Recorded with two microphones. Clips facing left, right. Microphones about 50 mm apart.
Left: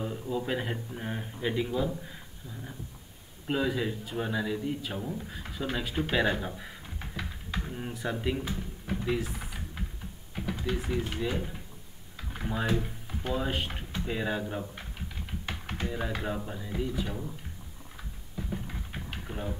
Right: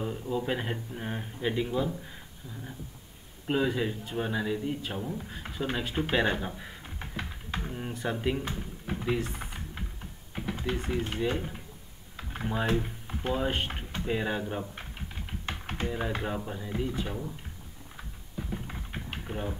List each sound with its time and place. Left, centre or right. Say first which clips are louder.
0.0 s a man's voice: right 1 dB; centre
9.2 s a sound: right 1 dB; centre
10.3 s typing: even; centre
10.9 s speech: right 4 dB; centre
15.9 s speech: right 1 dB; centre
18.7 s typing: right 1 dB; centre